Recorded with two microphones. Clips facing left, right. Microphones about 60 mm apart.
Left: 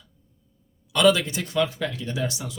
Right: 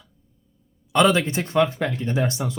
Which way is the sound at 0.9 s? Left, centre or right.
Right.